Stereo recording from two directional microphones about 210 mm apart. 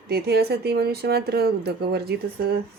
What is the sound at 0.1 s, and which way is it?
Speech, 50° right (ahead or behind).